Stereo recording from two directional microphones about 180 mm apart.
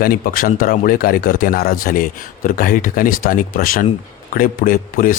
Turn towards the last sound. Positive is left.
turn(degrees=50)  # may be behind; listen again after turning